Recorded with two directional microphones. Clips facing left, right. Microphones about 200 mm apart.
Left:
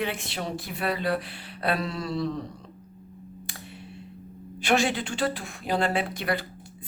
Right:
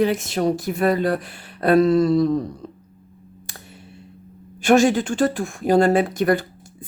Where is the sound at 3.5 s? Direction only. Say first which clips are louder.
Left 1 dB; 45° right (ahead or behind).